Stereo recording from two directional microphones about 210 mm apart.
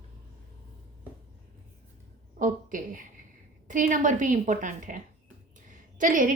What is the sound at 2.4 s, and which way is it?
A woman's voice, 40° right (ahead or behind).